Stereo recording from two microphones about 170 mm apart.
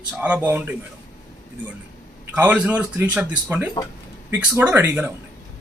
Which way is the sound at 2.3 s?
10° right (ahead or behind).